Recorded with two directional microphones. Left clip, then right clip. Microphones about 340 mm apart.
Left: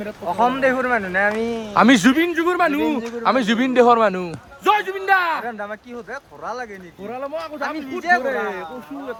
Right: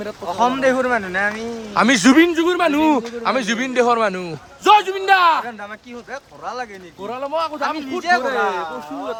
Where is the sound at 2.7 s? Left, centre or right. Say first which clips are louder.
Right 5 dB; centre.